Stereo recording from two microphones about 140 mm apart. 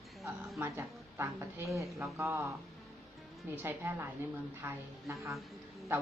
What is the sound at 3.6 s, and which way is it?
Speech, 15° right (ahead or behind).